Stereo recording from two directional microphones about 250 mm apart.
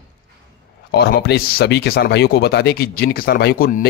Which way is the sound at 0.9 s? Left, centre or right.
Left.